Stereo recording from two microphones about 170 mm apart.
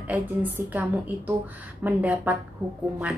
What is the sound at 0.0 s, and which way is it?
A woman's voice, 10° right (ahead or behind).